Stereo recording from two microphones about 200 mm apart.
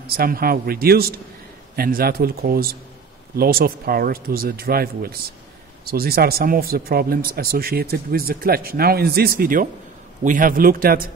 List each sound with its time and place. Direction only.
0.0 s speech: 50° right (ahead or behind)